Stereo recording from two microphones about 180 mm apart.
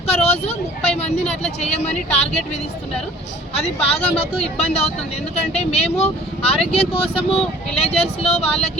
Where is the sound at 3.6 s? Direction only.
35° left (ahead or behind).